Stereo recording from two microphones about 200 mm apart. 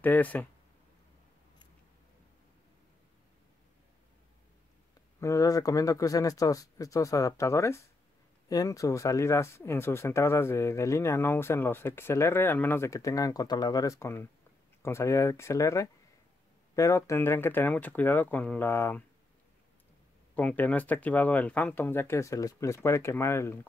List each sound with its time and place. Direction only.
0.0 s speech: 10° left (ahead or behind)
5.2 s speech: 15° left (ahead or behind)
20.3 s speech: 10° left (ahead or behind)